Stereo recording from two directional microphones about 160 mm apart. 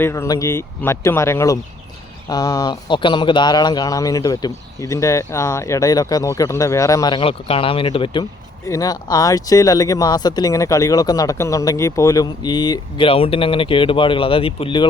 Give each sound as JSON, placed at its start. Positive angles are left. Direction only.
{"t": 0.0, "sound": "speech", "side_deg": 15}